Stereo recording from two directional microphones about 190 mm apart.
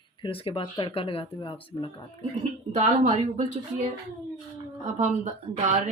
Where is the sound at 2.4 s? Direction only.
40° right (ahead or behind).